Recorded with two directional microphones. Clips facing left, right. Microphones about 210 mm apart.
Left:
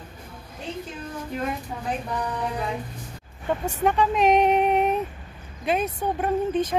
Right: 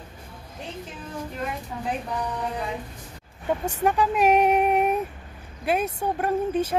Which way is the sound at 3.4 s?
10° right (ahead or behind).